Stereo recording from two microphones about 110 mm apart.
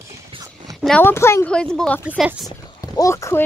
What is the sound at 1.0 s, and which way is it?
Speech, 25° left (ahead or behind).